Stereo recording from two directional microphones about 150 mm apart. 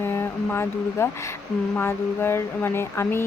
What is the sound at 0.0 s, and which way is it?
Speech, 15° left (ahead or behind).